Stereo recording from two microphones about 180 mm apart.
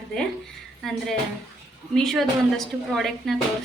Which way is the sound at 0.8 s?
Centre (ahead or behind).